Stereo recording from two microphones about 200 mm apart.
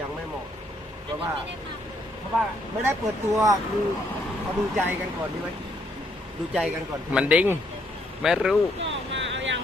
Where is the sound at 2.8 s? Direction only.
15° right (ahead or behind).